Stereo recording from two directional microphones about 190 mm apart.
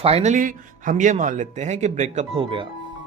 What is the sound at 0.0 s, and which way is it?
Speech, 35° right (ahead or behind).